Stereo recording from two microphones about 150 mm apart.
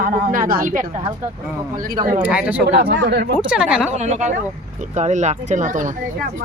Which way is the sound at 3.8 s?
50° right (ahead or behind).